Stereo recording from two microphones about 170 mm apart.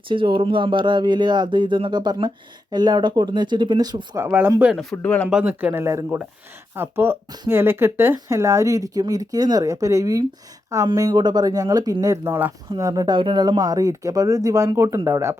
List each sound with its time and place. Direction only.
0.1 s speech: 30° right (ahead or behind); by 4.7 s 10° right (ahead or behind)
4.7 s speech: centre (ahead or behind)
5.3 s speech: 10° right (ahead or behind)